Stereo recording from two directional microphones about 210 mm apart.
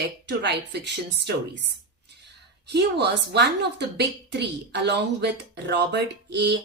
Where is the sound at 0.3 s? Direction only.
55° right (ahead or behind).